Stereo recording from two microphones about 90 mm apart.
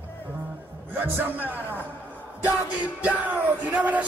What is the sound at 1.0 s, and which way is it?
Speech, 20° right (ahead or behind).